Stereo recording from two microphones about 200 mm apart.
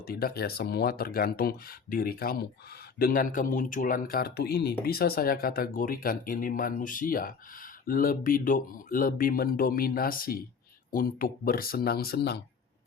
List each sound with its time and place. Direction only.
0.1 s speech: 50° left (ahead or behind)